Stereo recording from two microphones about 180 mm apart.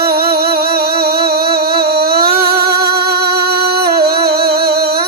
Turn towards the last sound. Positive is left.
turn(degrees=-60)  # may be behind; listen again after turning